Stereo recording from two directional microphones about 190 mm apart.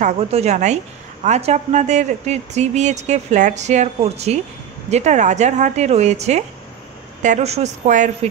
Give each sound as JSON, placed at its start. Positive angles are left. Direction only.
{"t": 0.0, "sound": "speech", "side_deg": -35}